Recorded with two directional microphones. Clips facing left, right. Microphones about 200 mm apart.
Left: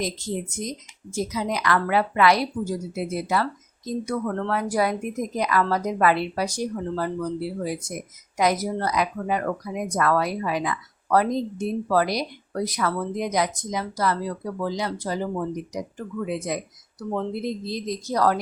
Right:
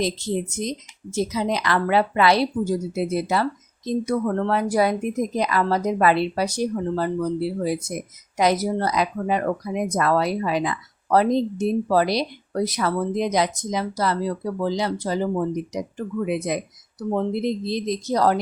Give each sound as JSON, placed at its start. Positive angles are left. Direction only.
{"t": 0.6, "sound": "speech", "side_deg": -25}